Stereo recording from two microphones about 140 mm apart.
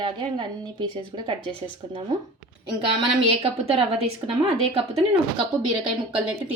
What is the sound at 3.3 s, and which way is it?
A woman's voice, 45° right (ahead or behind).